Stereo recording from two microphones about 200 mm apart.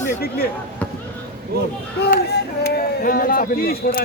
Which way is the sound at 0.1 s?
50° left (ahead or behind).